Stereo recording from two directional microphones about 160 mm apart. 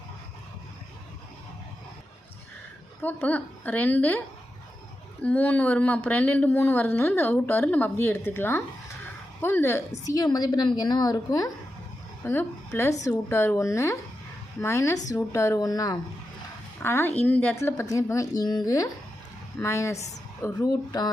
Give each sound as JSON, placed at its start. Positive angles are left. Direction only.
{"t": 3.0, "sound": "a woman's voice", "side_deg": 10}
{"t": 5.2, "sound": "a woman's voice", "side_deg": 10}